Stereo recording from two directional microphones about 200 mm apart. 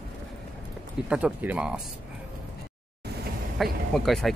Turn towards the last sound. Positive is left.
turn(degrees=0)  # may be behind; listen again after turning